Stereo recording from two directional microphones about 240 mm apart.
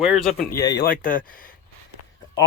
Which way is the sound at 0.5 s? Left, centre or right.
Centre.